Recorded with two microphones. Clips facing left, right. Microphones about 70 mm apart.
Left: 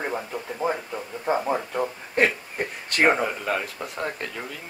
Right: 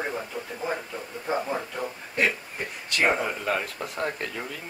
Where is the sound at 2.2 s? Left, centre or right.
Left.